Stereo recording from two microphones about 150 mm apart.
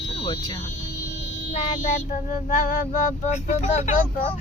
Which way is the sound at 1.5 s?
60° left (ahead or behind).